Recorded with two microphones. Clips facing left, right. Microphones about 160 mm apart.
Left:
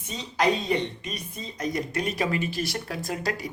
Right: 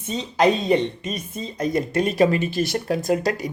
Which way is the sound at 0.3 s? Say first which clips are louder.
Right 6 dB; 25° right (ahead or behind).